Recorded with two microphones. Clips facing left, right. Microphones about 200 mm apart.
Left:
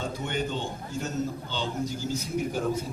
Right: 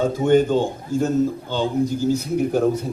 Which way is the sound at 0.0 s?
45° right (ahead or behind).